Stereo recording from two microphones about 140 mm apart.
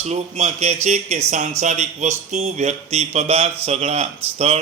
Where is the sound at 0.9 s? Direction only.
55° right (ahead or behind).